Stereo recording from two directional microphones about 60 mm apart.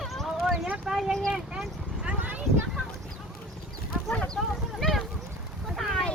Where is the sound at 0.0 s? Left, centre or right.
Centre.